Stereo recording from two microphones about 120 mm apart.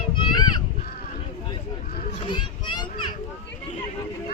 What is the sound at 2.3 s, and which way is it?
Children playing, 40° left (ahead or behind).